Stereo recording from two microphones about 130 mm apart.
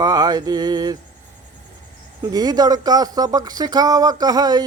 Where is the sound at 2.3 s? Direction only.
30° right (ahead or behind).